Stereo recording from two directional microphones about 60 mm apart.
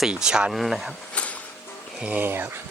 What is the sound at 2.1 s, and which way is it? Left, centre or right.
Speech, right.